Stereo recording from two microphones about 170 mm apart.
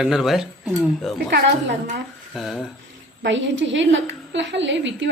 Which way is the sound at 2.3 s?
Centre (ahead or behind).